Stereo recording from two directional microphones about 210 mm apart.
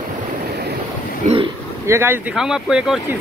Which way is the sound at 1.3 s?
35° right (ahead or behind).